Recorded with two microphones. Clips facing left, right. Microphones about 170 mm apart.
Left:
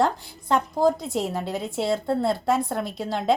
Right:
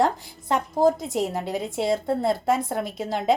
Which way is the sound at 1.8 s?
20° right (ahead or behind).